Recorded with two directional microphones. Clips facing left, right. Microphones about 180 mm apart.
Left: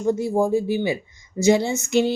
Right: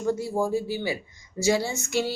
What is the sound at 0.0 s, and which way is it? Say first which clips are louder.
Speech: left 5 dB; 20° left (ahead or behind).